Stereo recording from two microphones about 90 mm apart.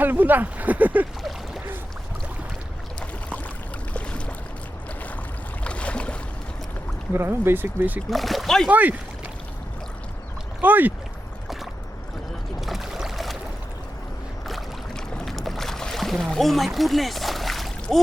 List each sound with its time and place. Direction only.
0.0 s speech: 20° right (ahead or behind)
3.9 s a sound: 15° left (ahead or behind)
5.6 s boat: 15° left (ahead or behind)
7.1 s speech: 25° right (ahead or behind)
8.1 s speech: centre (ahead or behind)
8.7 s speech: 20° right (ahead or behind)
10.6 s speech: 20° right (ahead or behind)
12.5 s boat: 5° right (ahead or behind)
14.4 s boat: centre (ahead or behind)